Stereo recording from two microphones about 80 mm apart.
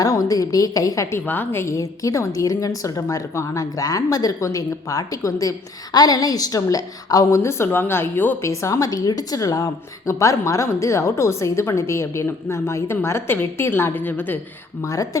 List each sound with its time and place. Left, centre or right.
0.0 s a woman's voice: left
1.2 s a woman's voice: left
1.6 s a woman's voice: left
8.4 s a woman's voice: left
14.8 s a woman's voice: left